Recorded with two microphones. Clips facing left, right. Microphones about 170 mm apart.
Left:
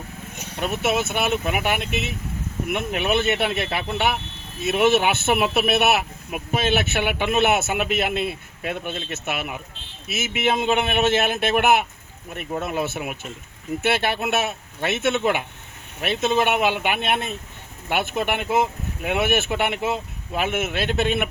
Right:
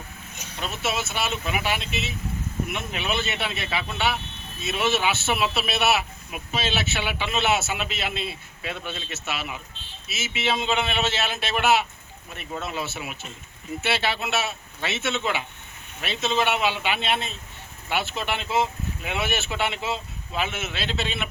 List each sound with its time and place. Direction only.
0.5 s a man's voice: 55° left (ahead or behind)